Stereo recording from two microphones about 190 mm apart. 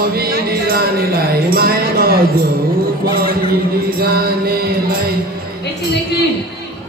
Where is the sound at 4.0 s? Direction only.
55° right (ahead or behind).